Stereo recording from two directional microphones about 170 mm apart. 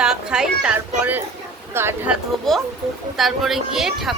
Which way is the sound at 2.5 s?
Centre (ahead or behind).